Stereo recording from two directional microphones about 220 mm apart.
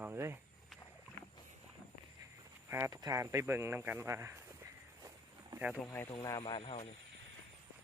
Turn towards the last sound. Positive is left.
turn(degrees=25)  # may be behind; listen again after turning